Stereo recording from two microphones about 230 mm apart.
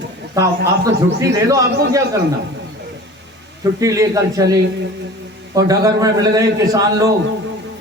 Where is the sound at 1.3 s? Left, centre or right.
Centre.